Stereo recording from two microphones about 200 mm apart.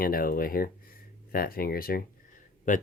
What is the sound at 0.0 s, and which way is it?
Speech, 45° left (ahead or behind).